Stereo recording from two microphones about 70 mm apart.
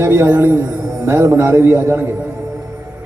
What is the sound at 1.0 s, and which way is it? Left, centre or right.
A man's voice, right.